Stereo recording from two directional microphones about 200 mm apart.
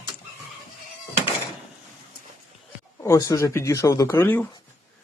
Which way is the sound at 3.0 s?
15° left (ahead or behind).